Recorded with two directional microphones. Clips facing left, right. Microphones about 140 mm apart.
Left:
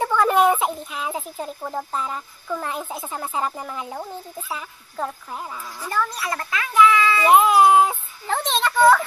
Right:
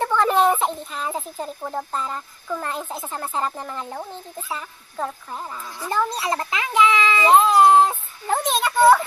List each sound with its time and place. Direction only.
0.0 s speech: 5° left (ahead or behind)
5.9 s a child's voice: 25° right (ahead or behind)
7.3 s child singing: 10° left (ahead or behind)
8.3 s a sound: 5° right (ahead or behind)